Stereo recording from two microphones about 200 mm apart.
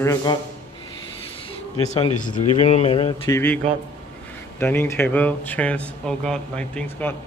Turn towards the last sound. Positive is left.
turn(degrees=5)  # may be behind; listen again after turning